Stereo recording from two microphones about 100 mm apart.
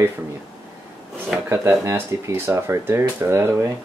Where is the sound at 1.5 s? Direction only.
30° right (ahead or behind).